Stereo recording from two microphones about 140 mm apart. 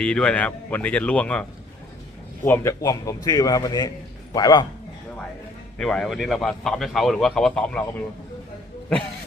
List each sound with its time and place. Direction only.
0.0 s speech: 5° left (ahead or behind)
2.4 s a man's voice: 20° left (ahead or behind)
5.7 s a man's voice: 5° left (ahead or behind)